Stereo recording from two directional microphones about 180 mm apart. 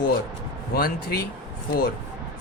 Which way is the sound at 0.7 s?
60° left (ahead or behind).